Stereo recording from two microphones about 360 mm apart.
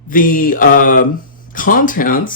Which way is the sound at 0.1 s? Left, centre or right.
Left.